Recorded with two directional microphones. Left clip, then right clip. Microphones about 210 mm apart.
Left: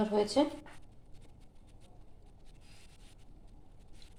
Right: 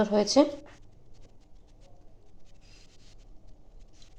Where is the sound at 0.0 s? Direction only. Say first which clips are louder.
Right 7 dB; 45° right (ahead or behind).